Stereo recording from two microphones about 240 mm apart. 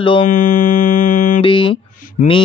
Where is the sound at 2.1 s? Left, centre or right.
Left.